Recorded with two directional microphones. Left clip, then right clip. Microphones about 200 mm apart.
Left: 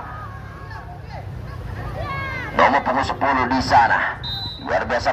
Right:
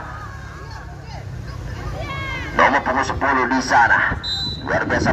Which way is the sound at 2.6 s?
45° left (ahead or behind).